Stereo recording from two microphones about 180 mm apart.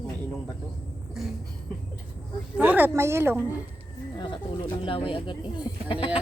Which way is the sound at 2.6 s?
10° right (ahead or behind).